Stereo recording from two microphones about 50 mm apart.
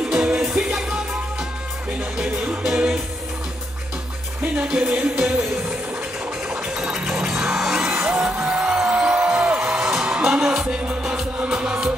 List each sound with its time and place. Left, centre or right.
0.1 s music: centre
2.1 s music: right
4.6 s music: right
6.5 s music: centre